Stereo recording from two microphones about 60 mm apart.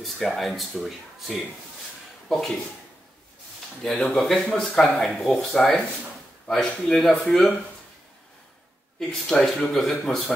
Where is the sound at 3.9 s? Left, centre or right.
Centre.